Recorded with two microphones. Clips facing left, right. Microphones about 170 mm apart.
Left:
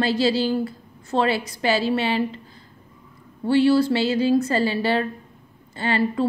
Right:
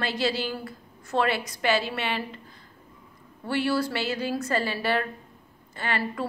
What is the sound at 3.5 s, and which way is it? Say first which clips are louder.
A woman's voice: left 9 dB; 30° left (ahead or behind).